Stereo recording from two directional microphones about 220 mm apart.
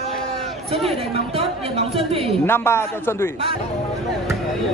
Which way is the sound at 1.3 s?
25° right (ahead or behind).